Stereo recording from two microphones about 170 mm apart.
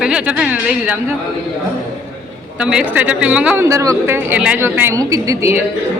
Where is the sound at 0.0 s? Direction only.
5° right (ahead or behind).